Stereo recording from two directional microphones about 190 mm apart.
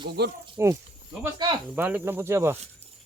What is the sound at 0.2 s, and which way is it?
Speech, 60° right (ahead or behind).